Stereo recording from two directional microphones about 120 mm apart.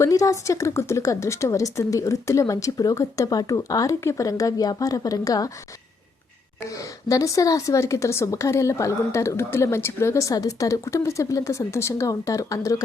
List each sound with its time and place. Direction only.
0.0 s a woman's voice: 25° left (ahead or behind)
6.6 s a woman's voice: 25° left (ahead or behind)